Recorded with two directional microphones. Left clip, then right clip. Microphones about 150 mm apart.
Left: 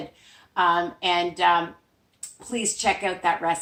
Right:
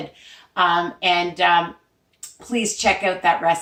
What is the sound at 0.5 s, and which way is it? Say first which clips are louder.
A woman's voice: right 3 dB; 15° right (ahead or behind).